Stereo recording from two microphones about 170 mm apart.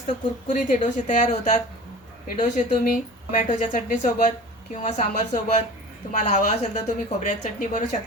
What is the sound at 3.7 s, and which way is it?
A woman's voice, 45° left (ahead or behind).